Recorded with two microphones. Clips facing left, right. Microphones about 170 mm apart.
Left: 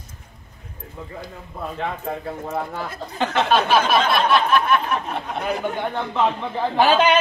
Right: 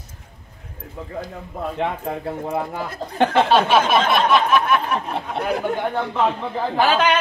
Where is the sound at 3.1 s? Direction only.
55° right (ahead or behind).